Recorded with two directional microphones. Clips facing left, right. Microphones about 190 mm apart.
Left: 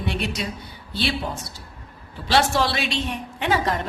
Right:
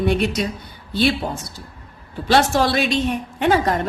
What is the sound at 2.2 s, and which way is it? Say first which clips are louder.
A woman's voice: right 4 dB; 50° right (ahead or behind).